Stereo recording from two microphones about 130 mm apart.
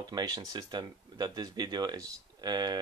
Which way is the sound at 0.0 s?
30° right (ahead or behind).